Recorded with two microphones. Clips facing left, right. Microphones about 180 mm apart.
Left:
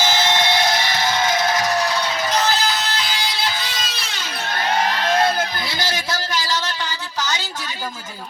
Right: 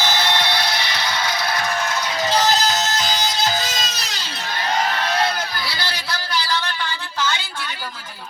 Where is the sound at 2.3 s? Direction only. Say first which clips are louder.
Right 3 dB; 40° right (ahead or behind).